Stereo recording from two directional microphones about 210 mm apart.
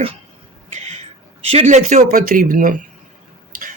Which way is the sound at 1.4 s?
30° right (ahead or behind).